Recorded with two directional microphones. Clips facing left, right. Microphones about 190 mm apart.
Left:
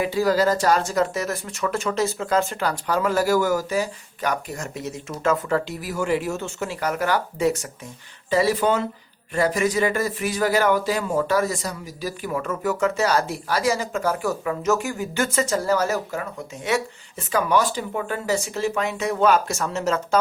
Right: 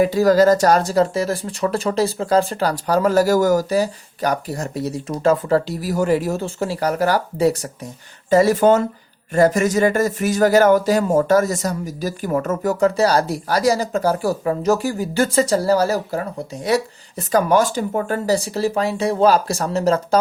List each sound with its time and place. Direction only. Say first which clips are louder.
0.0 s speech: right 6 dB; 45° right (ahead or behind)